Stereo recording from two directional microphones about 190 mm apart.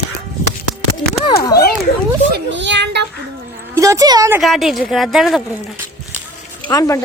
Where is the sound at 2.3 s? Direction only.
70° right (ahead or behind).